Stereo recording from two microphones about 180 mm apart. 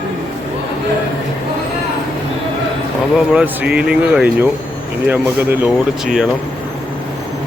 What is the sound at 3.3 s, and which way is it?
Speech, 5° right (ahead or behind).